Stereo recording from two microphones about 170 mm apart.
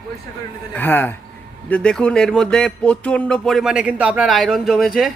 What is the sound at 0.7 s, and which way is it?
Speech, 10° left (ahead or behind).